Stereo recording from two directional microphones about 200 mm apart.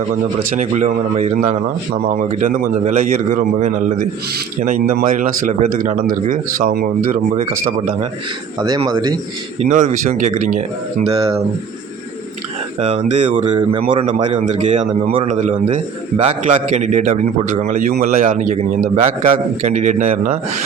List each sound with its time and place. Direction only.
0.5 s speech: 35° right (ahead or behind)
8.9 s speech: 20° right (ahead or behind)
9.6 s speech: 35° right (ahead or behind)
12.8 s speech: 30° right (ahead or behind)